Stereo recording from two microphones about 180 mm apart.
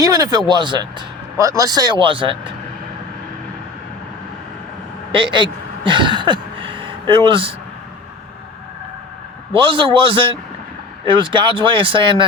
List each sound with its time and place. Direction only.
0.0 s speech: 20° right (ahead or behind)
5.1 s speech: 25° right (ahead or behind)
9.5 s speech: 30° right (ahead or behind)